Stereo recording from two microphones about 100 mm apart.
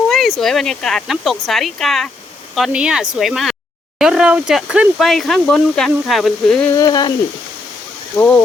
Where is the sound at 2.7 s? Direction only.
10° right (ahead or behind).